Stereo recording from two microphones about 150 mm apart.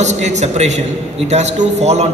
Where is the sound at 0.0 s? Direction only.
50° right (ahead or behind).